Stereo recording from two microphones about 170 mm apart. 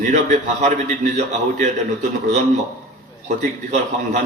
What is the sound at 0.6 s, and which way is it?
A man's voice, 45° right (ahead or behind).